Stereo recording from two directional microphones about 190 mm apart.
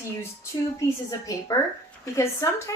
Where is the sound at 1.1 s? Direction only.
15° left (ahead or behind).